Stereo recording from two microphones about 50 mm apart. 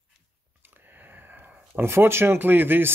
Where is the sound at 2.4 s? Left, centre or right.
Right.